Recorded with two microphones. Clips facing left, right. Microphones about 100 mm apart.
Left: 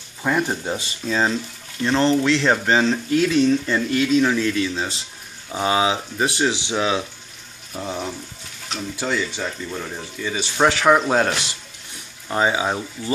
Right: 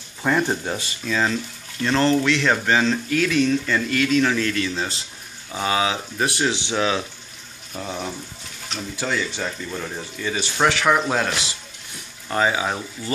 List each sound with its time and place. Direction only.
0.2 s speech: 5° left (ahead or behind)
0.7 s speech: 25° left (ahead or behind)
5.5 s speech: 20° left (ahead or behind); by 10.4 s centre (ahead or behind)
10.6 s speech: 25° left (ahead or behind)